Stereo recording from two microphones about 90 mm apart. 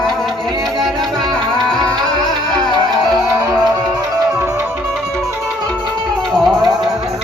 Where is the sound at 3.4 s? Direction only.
45° right (ahead or behind).